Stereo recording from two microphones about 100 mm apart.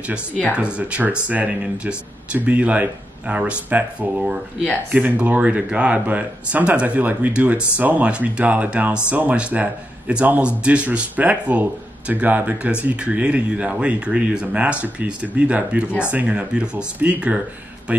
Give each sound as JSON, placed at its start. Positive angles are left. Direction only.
{"t": 0.7, "sound": "speech", "side_deg": -10}